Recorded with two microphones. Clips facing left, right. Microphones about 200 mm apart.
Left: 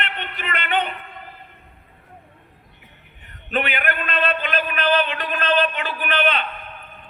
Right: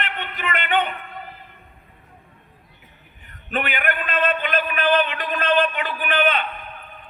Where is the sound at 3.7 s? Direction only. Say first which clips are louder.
Even; 45° right (ahead or behind).